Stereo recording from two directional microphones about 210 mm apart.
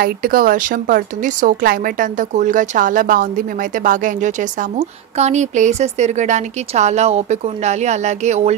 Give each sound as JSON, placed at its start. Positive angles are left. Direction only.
{"t": 0.0, "sound": "a woman's voice", "side_deg": -45}